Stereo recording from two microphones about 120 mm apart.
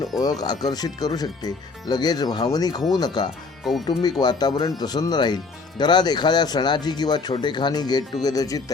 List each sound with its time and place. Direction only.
0.2 s speech: 35° left (ahead or behind)